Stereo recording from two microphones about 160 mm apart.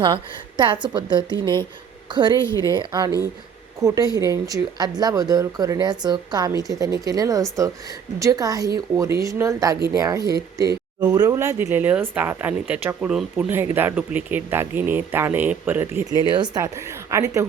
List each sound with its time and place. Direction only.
0.0 s speech: 30° right (ahead or behind); by 16.0 s 10° right (ahead or behind)
16.3 s speech: 25° right (ahead or behind)